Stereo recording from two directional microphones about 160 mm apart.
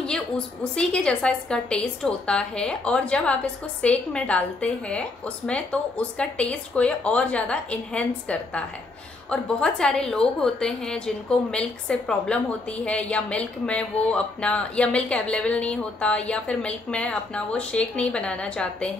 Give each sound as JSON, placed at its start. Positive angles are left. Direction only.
{"t": 0.7, "sound": "a woman's voice", "side_deg": 5}